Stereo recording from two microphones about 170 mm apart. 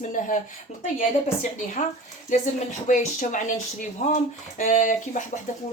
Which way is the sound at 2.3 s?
45° left (ahead or behind).